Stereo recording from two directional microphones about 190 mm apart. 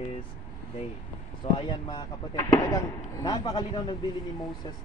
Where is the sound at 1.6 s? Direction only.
25° left (ahead or behind).